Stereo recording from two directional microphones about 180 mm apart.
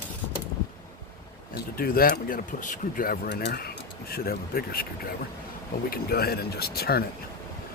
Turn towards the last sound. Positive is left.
turn(degrees=60)  # may be behind; listen again after turning